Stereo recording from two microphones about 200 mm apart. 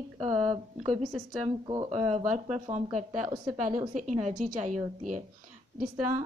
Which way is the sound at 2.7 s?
35° right (ahead or behind).